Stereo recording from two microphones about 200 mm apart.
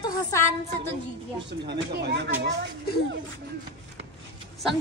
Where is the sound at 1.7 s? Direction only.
60° right (ahead or behind).